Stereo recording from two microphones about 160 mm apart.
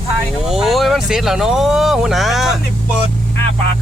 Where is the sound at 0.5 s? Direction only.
Centre (ahead or behind).